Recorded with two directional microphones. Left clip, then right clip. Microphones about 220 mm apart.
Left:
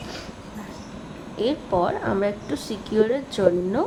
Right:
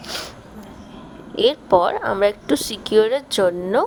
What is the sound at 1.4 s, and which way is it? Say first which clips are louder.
A woman's voice: right 7 dB; 40° right (ahead or behind).